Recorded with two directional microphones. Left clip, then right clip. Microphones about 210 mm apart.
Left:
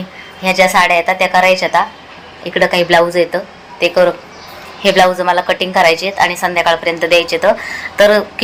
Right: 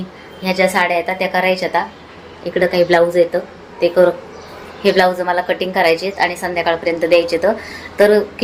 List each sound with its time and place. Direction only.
0.4 s a woman's voice: 15° left (ahead or behind)